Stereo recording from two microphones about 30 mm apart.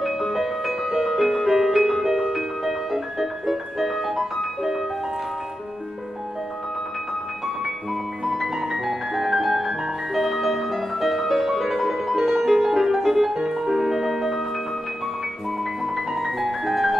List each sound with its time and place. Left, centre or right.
0.0 s music: centre
8.5 s music: centre
15.8 s music: centre